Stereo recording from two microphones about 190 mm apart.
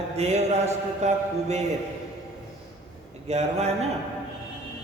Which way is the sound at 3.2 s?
35° right (ahead or behind).